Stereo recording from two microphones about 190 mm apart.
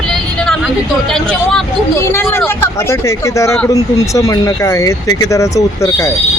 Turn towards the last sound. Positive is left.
turn(degrees=15)  # may be behind; listen again after turning